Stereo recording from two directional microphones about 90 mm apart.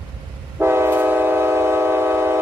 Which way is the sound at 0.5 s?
30° right (ahead or behind).